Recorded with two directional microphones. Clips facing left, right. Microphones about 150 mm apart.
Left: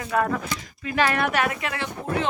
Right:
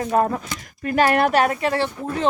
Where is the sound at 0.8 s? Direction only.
50° right (ahead or behind).